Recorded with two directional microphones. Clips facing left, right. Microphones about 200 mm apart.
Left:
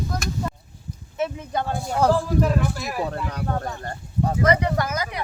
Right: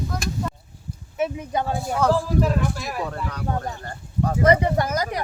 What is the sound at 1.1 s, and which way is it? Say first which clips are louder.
Speech: right 1 dB; 15° right (ahead or behind).